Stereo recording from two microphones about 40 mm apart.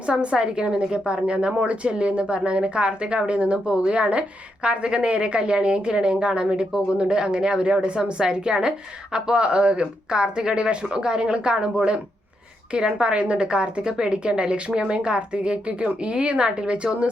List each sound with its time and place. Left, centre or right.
0.1 s a woman's voice: right
12.8 s a woman's voice: right